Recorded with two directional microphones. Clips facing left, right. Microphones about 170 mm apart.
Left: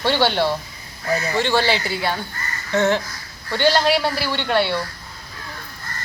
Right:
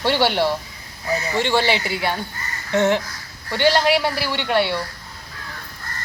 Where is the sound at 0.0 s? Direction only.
10° right (ahead or behind).